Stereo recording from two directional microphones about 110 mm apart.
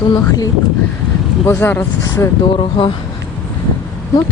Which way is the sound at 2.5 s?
50° left (ahead or behind).